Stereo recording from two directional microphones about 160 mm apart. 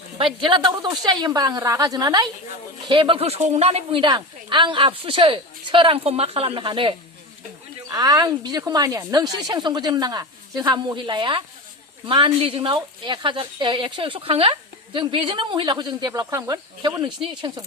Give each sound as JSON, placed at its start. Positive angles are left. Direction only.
{"t": 0.3, "sound": "a woman's voice", "side_deg": -30}